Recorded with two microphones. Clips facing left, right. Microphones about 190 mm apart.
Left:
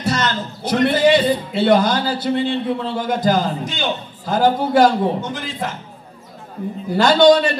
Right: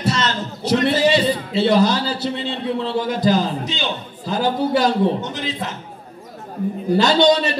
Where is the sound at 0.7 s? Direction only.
55° left (ahead or behind).